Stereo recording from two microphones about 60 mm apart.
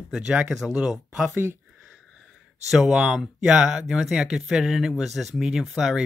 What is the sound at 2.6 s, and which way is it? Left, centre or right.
Speech, centre.